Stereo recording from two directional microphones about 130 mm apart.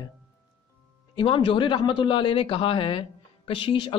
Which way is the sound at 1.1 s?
40° left (ahead or behind).